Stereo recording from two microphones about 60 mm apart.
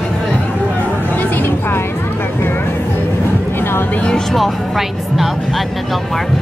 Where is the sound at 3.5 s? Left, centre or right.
Left.